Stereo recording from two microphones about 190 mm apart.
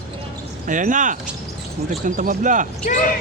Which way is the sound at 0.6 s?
45° right (ahead or behind).